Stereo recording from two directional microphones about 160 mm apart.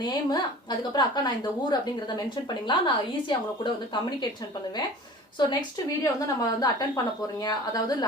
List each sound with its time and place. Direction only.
0.0 s a woman's voice: 25° left (ahead or behind)
5.4 s a woman's voice: 25° left (ahead or behind)